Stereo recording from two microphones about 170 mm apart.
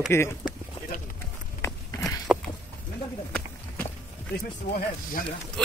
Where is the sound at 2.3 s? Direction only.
5° right (ahead or behind).